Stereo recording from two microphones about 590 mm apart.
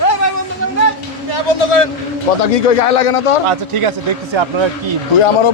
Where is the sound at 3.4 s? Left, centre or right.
Right.